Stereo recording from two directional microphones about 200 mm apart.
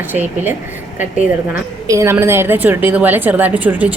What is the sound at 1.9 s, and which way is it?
A woman's voice, 15° right (ahead or behind).